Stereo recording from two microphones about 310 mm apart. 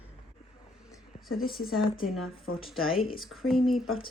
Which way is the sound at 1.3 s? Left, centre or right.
Centre.